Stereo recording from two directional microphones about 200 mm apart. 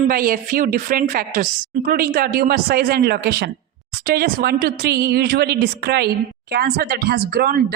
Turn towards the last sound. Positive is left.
turn(degrees=-50)  # may be behind; listen again after turning